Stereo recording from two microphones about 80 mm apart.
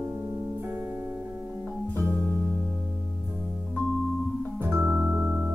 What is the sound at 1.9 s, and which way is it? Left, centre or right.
Music, left.